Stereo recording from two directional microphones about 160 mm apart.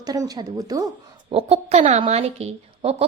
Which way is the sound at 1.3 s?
40° right (ahead or behind).